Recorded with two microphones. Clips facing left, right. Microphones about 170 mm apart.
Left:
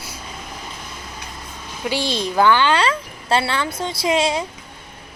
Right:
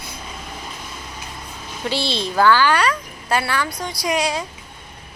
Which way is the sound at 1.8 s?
15° left (ahead or behind).